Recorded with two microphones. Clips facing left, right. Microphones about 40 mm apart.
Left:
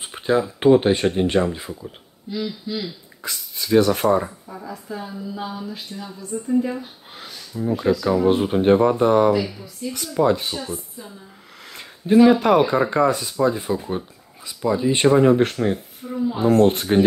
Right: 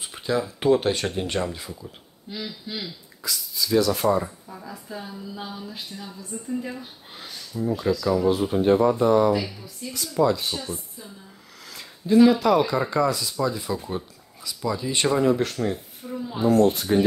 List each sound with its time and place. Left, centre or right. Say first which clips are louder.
0.0 s speech: left 5 dB; left
2.7 s speech: left 4 dB; centre
3.3 s speech: left 2 dB; left
4.5 s speech: left 5 dB; centre
7.5 s speech: left 4 dB; left
9.3 s speech: left 4 dB; centre
10.0 s speech: left 2 dB; left
10.5 s speech: left 2 dB; centre
12.3 s speech: left 4 dB; left
16.0 s speech: left 2 dB; centre
16.3 s speech: left 2 dB; left